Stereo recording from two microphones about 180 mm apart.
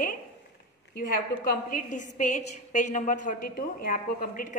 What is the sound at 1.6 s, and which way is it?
A woman's voice, 50° left (ahead or behind).